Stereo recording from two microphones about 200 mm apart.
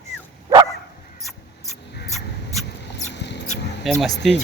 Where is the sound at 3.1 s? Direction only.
60° left (ahead or behind).